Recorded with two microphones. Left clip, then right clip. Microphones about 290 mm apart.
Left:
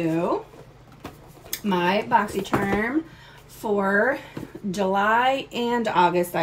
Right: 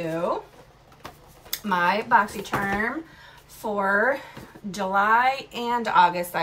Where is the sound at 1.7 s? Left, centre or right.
Right.